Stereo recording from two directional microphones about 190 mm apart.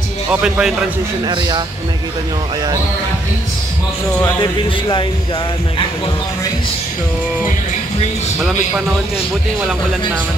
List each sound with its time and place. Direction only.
0.3 s speech: 5° right (ahead or behind)
1.2 s speech: 20° right (ahead or behind)
4.4 s speech: 25° left (ahead or behind)
8.4 s speech: centre (ahead or behind)